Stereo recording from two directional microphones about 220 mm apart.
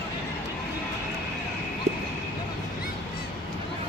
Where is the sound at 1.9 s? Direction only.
30° right (ahead or behind).